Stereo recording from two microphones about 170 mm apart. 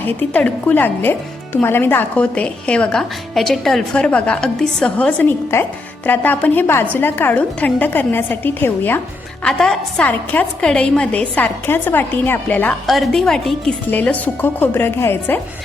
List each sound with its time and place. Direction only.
0.0 s a woman's voice: 10° left (ahead or behind)